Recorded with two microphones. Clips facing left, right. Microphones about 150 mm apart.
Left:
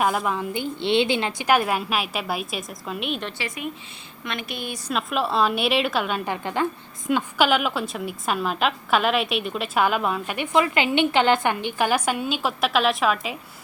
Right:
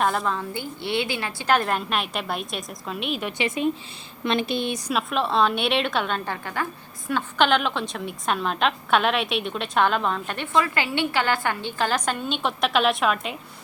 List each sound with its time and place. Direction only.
0.0 s a woman's voice: 5° left (ahead or behind); by 1.5 s 20° left (ahead or behind)
1.5 s a woman's voice: 10° left (ahead or behind)
3.3 s speech: 25° right (ahead or behind)
4.9 s a woman's voice: centre (ahead or behind)